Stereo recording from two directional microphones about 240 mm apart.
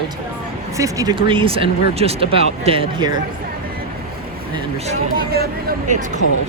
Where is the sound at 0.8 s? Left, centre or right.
Centre.